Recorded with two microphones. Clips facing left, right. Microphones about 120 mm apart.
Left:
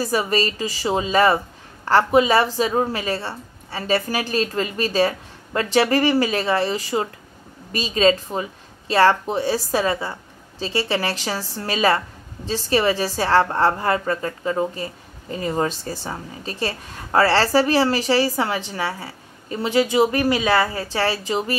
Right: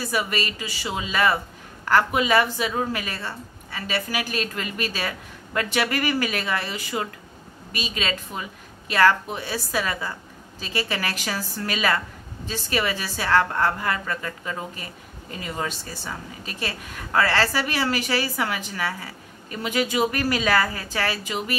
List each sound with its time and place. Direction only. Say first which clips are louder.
0.0 s a woman's voice: left 5 dB; 35° left (ahead or behind)